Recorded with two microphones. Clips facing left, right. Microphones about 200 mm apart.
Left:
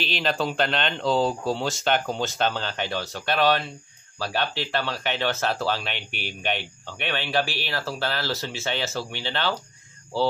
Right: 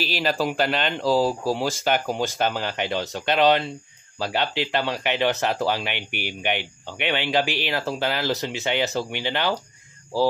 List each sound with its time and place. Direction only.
0.0 s speech: 5° right (ahead or behind)